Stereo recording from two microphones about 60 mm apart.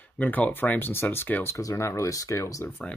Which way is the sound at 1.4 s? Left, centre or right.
Left.